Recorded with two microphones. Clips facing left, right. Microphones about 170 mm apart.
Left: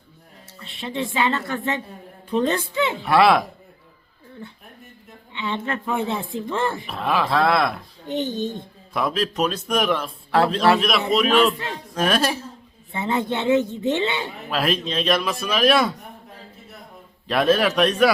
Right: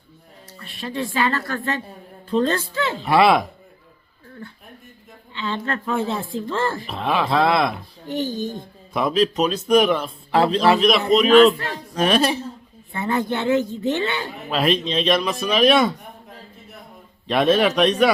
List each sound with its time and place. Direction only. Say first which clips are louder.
0.6 s speech: even; 25° left (ahead or behind)
3.1 s a man's voice: right 1 dB; centre (ahead or behind)
5.4 s speech: right 1 dB; 20° left (ahead or behind)
6.8 s a man's voice: right 1 dB; centre (ahead or behind)
8.0 s speech: even; 20° left (ahead or behind)
8.9 s a man's voice: right 4 dB; centre (ahead or behind)
12.9 s speech: right 1 dB; 20° left (ahead or behind)
14.5 s a man's voice: right 3 dB; centre (ahead or behind)
17.2 s a man's voice: right 1 dB; centre (ahead or behind)